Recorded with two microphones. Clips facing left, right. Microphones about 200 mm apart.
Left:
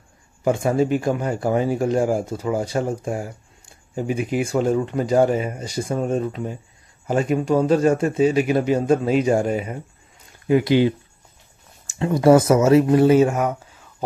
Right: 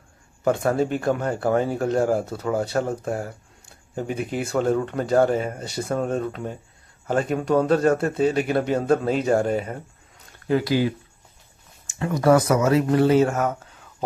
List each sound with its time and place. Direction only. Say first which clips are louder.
0.4 s speech: left 2 dB; 10° left (ahead or behind)
10.4 s speech: left 4 dB; 20° left (ahead or behind)
12.0 s speech: left 4 dB; 25° left (ahead or behind); by 13.7 s 10° left (ahead or behind)